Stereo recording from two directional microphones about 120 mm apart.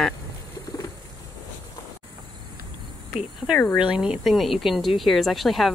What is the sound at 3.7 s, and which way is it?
Speech, 5° right (ahead or behind).